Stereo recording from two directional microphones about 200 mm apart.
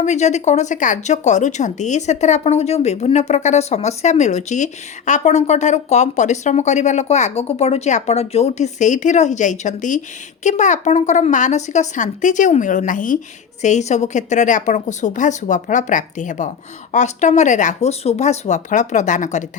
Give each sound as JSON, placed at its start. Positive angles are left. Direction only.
{"t": 0.0, "sound": "a woman's voice", "side_deg": 35}